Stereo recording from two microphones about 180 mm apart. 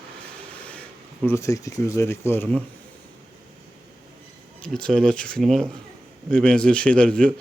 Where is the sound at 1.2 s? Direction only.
15° left (ahead or behind).